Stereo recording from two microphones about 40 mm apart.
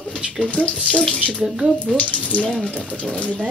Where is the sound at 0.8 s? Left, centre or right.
Left.